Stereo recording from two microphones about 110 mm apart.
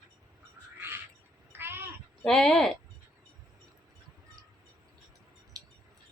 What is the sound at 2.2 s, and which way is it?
Speech, 5° left (ahead or behind).